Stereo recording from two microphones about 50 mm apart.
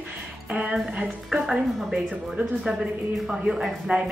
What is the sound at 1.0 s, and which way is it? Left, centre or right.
A woman's voice, centre.